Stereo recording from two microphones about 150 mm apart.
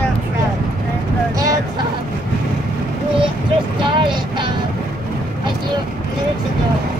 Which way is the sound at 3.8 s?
35° right (ahead or behind).